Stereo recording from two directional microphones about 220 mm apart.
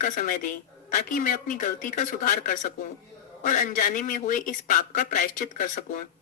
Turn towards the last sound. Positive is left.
turn(degrees=35)  # may be behind; listen again after turning